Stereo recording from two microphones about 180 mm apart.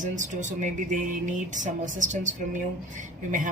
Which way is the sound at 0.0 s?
45° right (ahead or behind).